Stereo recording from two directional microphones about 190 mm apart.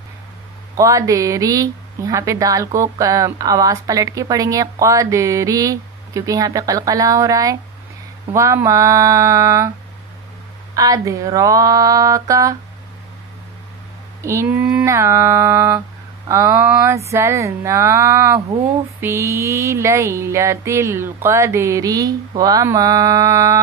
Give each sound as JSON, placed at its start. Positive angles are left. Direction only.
{"t": 0.7, "sound": "a woman's voice", "side_deg": -15}
{"t": 10.8, "sound": "a woman's voice", "side_deg": -15}
{"t": 14.2, "sound": "a woman's voice", "side_deg": -15}